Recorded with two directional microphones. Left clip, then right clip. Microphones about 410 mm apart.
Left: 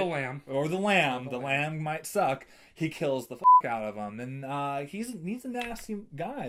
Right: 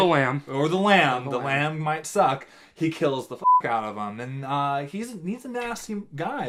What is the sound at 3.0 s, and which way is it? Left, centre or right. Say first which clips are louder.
Speech: right 1 dB; left.